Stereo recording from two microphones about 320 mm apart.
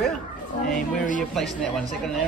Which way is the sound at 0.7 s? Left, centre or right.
Left.